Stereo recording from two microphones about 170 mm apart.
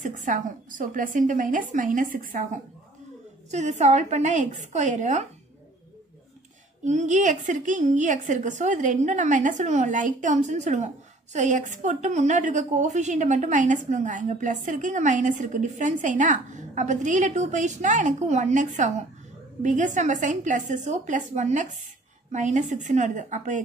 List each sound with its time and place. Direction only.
0.0 s a woman's voice: 50° right (ahead or behind)
6.8 s a woman's voice: 45° right (ahead or behind)